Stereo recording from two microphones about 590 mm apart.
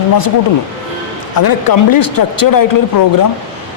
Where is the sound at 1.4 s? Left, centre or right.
Left.